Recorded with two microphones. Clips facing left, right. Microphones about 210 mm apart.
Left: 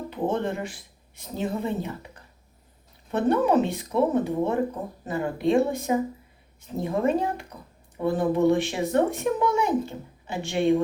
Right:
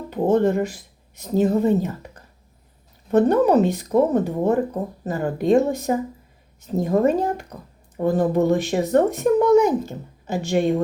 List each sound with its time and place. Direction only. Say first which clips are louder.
0.1 s a woman's voice: right 9 dB; 40° right (ahead or behind)